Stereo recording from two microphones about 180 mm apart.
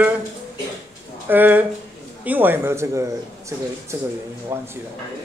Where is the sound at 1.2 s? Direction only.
10° right (ahead or behind).